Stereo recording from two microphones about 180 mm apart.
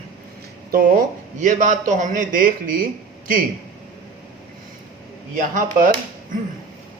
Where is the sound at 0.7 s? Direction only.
50° right (ahead or behind).